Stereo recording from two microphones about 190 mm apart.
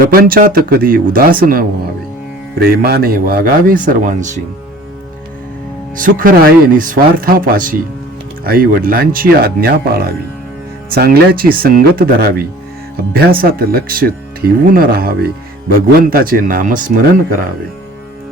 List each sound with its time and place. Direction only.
0.0 s speech: 50° right (ahead or behind)
6.0 s speech: 45° right (ahead or behind)